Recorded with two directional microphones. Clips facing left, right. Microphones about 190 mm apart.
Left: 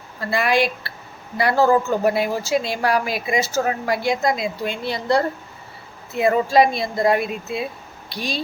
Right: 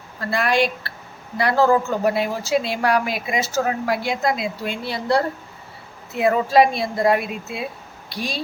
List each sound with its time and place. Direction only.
0.2 s speech: centre (ahead or behind)